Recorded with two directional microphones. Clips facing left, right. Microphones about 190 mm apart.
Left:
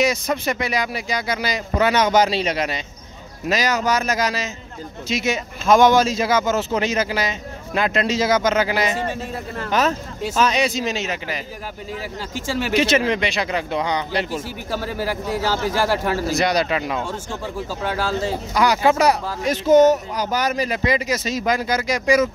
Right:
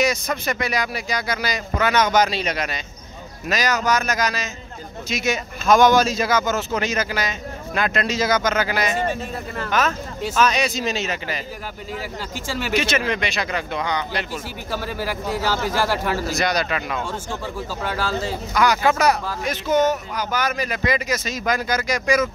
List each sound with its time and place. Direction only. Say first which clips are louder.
0.0 s speech: left 2 dB; 25° left (ahead or behind)
12.4 s speech: left 4 dB; 25° left (ahead or behind)
18.5 s speech: left 1 dB; 30° left (ahead or behind)